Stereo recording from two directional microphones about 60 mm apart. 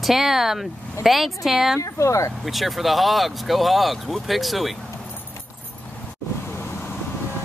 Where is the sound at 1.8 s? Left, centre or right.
Left.